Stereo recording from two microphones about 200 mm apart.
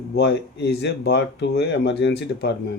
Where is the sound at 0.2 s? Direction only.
60° left (ahead or behind).